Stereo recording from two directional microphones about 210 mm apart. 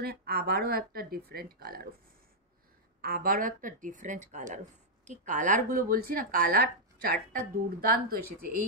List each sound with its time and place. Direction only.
0.0 s speech: 45° right (ahead or behind)
3.0 s speech: 45° right (ahead or behind)